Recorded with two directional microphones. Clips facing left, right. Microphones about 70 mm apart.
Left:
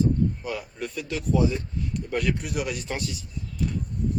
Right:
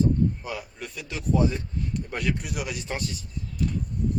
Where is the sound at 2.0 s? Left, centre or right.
Centre.